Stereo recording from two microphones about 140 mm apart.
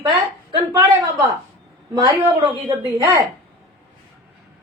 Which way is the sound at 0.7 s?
25° right (ahead or behind).